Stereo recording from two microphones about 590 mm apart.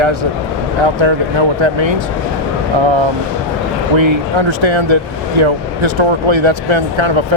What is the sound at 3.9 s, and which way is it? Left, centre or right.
Speech, right.